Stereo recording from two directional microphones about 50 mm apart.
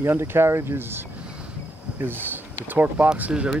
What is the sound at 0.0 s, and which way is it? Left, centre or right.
Speech, right.